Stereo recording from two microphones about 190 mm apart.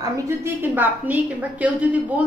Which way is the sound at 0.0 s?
15° right (ahead or behind).